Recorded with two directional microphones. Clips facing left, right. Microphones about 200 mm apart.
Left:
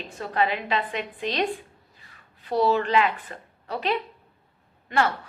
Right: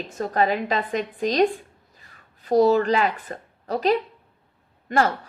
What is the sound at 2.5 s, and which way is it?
A woman's voice, 40° right (ahead or behind).